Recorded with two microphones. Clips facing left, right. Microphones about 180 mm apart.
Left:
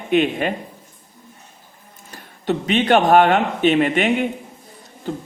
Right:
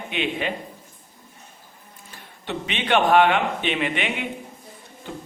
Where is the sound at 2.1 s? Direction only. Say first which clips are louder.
Left 9 dB; 40° left (ahead or behind).